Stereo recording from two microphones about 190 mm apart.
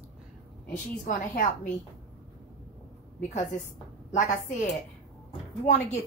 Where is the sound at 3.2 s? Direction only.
40° left (ahead or behind).